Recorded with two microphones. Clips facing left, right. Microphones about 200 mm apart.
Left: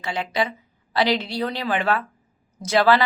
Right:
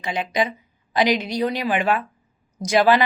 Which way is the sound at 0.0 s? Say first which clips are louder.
Right 2 dB; 15° right (ahead or behind).